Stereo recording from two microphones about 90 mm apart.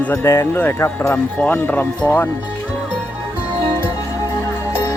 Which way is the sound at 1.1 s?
20° left (ahead or behind).